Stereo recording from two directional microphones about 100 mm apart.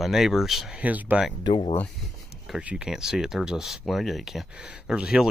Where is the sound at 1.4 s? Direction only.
60° left (ahead or behind).